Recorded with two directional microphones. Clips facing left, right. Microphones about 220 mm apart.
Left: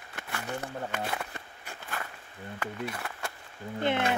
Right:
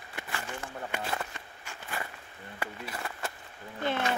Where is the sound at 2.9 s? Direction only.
Centre (ahead or behind).